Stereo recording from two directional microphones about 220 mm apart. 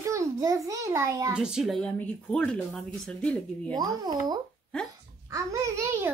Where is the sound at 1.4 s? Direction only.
Centre (ahead or behind).